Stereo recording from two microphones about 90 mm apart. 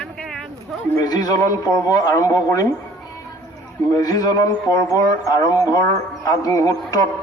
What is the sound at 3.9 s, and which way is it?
A man's voice, 45° left (ahead or behind).